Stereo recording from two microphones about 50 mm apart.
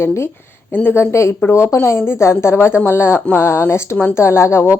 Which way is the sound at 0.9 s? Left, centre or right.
Left.